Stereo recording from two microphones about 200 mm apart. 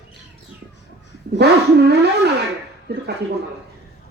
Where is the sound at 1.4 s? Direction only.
55° right (ahead or behind).